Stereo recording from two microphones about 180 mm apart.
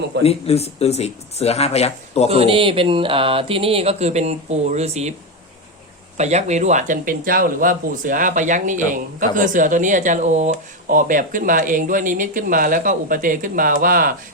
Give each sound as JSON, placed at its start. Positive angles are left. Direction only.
{"t": 0.2, "sound": "speech", "side_deg": 35}
{"t": 2.3, "sound": "speech", "side_deg": -30}
{"t": 6.1, "sound": "speech", "side_deg": -40}